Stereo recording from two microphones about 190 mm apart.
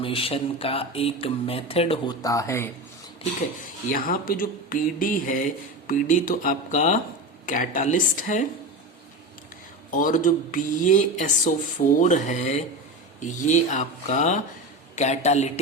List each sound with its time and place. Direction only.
0.0 s speech: 30° left (ahead or behind)
2.2 s speech: 15° left (ahead or behind)
3.9 s speech: 50° left (ahead or behind)
9.9 s speech: 45° left (ahead or behind)